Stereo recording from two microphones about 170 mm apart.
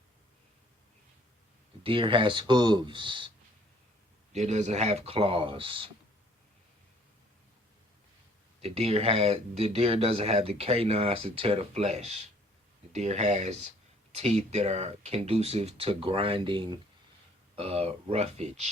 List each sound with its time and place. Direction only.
1.8 s speech: 30° right (ahead or behind)
4.3 s speech: 40° right (ahead or behind)
8.6 s speech: 35° right (ahead or behind)